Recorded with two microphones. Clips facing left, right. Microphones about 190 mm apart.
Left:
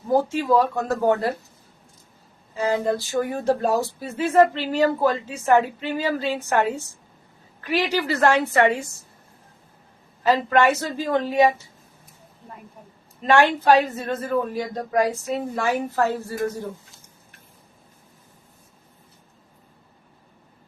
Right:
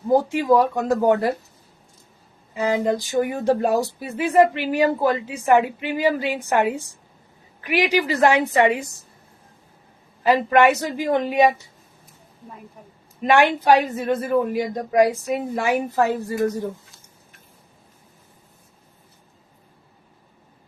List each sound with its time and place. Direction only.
0.1 s a woman's voice: 15° right (ahead or behind)
2.6 s a woman's voice: 15° right (ahead or behind)
10.2 s a woman's voice: 15° right (ahead or behind)
13.2 s a woman's voice: 15° right (ahead or behind)